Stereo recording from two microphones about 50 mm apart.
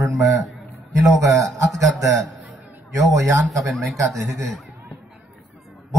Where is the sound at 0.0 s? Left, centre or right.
Right.